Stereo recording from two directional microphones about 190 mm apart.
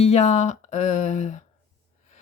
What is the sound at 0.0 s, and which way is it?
Speech, 35° left (ahead or behind).